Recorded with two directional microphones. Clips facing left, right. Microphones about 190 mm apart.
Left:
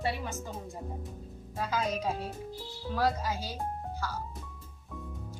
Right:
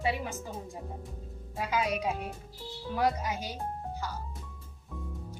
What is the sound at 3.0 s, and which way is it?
Speech, 20° right (ahead or behind).